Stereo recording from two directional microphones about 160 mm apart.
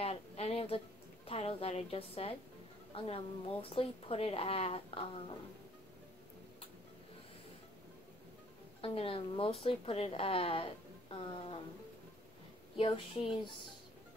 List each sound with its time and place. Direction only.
0.0 s a woman's voice: 40° left (ahead or behind)
8.8 s speech: 35° left (ahead or behind)
12.7 s speech: 35° left (ahead or behind)